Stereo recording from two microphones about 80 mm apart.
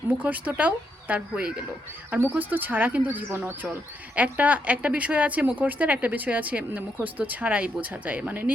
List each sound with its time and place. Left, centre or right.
0.2 s speech: centre
2.0 s speech: right